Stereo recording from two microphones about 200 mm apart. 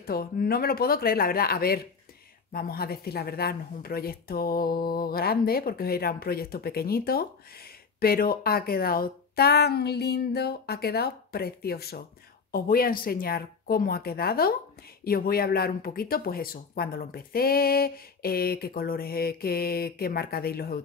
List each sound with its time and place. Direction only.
0.0 s speech: 50° left (ahead or behind)